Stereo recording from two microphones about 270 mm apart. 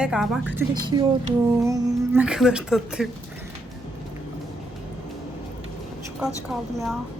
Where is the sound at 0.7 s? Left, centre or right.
Centre.